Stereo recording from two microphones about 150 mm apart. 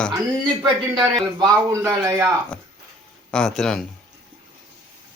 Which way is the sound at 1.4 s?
20° right (ahead or behind).